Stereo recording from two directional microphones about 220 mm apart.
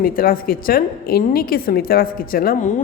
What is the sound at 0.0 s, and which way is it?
A woman's voice, 40° left (ahead or behind).